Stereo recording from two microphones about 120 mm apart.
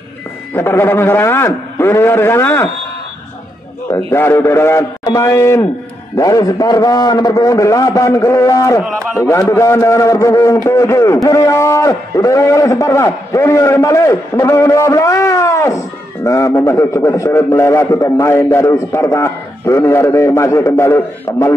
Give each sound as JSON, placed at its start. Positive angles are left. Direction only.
{"t": 0.6, "sound": "a man's voice", "side_deg": 20}
{"t": 4.1, "sound": "a man's voice", "side_deg": 20}